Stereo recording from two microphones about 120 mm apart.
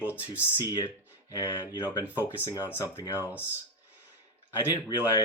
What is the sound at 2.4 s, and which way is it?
Speech, 25° left (ahead or behind).